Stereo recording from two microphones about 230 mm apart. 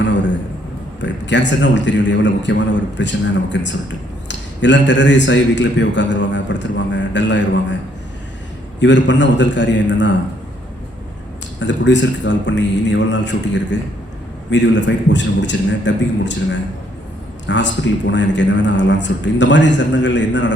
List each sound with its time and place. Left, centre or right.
1.0 s a man's voice: left
8.8 s a man's voice: left
11.6 s a man's voice: left